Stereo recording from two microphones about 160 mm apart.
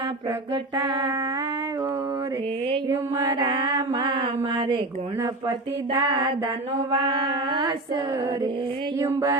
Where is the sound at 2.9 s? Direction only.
15° right (ahead or behind).